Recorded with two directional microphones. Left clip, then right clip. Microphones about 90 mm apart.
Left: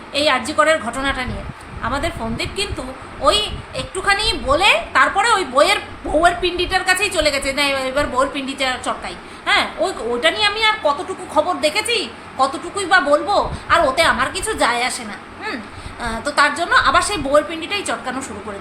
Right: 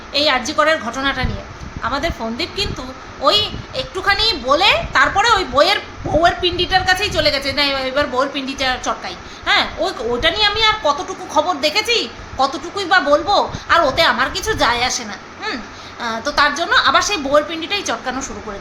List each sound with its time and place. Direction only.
0.1 s a woman's voice: 15° right (ahead or behind)